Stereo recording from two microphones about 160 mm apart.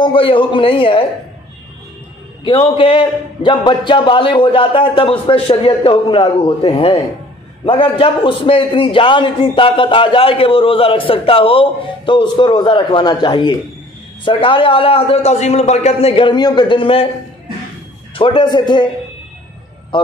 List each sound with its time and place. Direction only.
0.0 s a man's voice: 35° left (ahead or behind)
2.4 s a man's voice: 35° left (ahead or behind)
18.1 s a man's voice: 30° left (ahead or behind)
19.9 s a man's voice: 30° left (ahead or behind)